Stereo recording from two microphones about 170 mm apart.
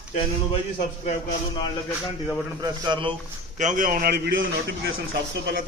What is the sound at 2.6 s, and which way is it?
Speech, 25° right (ahead or behind).